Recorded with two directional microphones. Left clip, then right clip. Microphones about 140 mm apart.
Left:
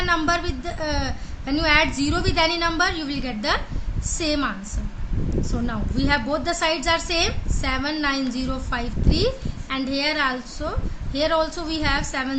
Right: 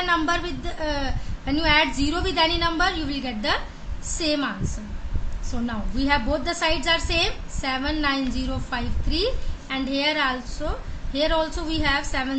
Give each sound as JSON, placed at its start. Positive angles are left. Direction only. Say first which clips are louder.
{"t": 0.0, "sound": "a woman's voice", "louder": "left 1 dB", "side_deg": 15}
{"t": 6.1, "sound": "a woman's voice", "louder": "left 1 dB", "side_deg": 25}